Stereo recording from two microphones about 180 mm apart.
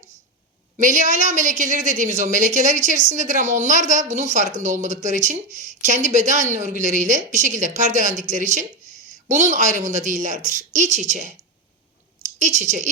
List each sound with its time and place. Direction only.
0.8 s speech: 45° right (ahead or behind)
12.4 s speech: 40° right (ahead or behind)